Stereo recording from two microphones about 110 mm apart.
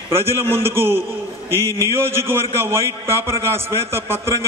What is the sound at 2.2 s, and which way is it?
A man's voice, 25° right (ahead or behind).